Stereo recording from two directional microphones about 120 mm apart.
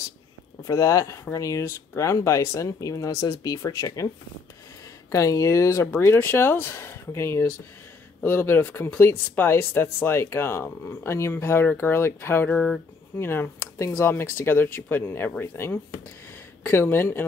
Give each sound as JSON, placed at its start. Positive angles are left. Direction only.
{"t": 0.7, "sound": "speech", "side_deg": 25}
{"t": 5.1, "sound": "speech", "side_deg": 25}
{"t": 12.5, "sound": "speech", "side_deg": 5}
{"t": 13.2, "sound": "speech", "side_deg": 20}